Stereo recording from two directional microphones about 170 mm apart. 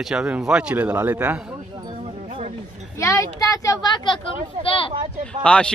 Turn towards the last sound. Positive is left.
turn(degrees=5)  # may be behind; listen again after turning